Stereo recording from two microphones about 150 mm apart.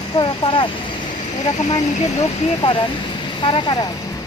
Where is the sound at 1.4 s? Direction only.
50° left (ahead or behind).